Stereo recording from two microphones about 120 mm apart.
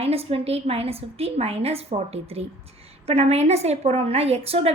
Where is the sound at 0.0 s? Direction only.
55° right (ahead or behind).